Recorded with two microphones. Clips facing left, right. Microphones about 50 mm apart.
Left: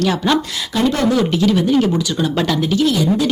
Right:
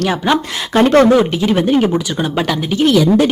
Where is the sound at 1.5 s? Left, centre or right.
Right.